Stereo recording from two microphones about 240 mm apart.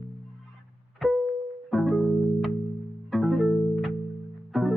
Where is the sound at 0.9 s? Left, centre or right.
Centre.